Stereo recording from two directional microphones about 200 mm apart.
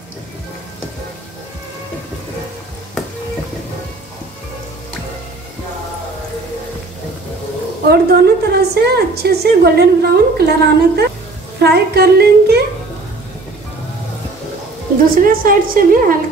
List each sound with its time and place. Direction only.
7.9 s a woman's voice: 50° right (ahead or behind)
15.1 s a woman's voice: 45° right (ahead or behind)